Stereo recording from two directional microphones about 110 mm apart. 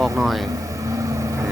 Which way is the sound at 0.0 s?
Centre (ahead or behind).